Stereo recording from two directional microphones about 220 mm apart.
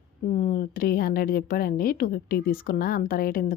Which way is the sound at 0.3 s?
35° left (ahead or behind).